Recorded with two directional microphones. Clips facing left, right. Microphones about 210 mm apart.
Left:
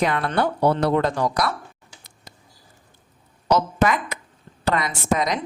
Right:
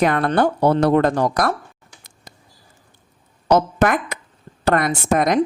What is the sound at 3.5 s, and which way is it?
A woman's voice, 55° right (ahead or behind).